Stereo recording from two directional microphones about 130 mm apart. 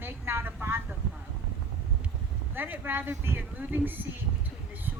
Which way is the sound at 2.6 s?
15° right (ahead or behind).